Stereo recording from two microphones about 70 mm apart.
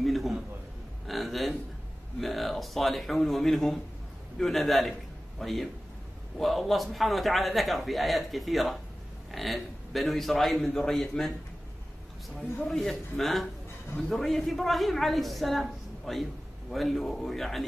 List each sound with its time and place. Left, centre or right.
0.0 s a sound: centre
2.1 s a man's voice: centre
12.4 s a man's voice: centre